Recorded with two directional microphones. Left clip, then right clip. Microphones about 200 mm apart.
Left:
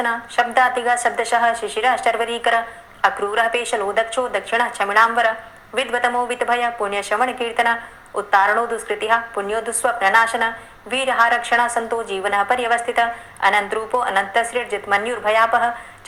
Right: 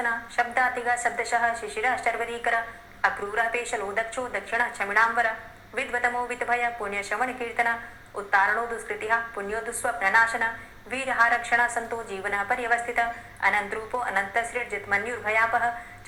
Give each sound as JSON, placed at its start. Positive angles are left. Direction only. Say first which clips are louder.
{"t": 0.0, "sound": "a woman's voice", "louder": "left 7 dB", "side_deg": 40}